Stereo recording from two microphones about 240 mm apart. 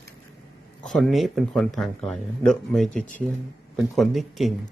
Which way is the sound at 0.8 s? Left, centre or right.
Centre.